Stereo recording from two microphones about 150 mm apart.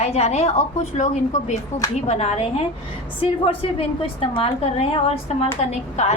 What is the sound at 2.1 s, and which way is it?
Speech, 45° left (ahead or behind).